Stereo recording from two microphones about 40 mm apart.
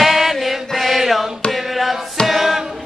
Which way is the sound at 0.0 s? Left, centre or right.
Centre.